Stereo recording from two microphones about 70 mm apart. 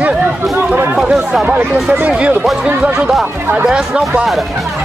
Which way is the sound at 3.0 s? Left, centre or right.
Centre.